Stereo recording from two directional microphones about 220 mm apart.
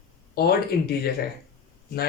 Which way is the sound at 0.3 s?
45° left (ahead or behind).